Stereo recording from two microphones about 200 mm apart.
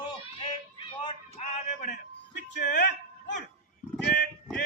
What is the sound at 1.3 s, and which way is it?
Music, 40° left (ahead or behind).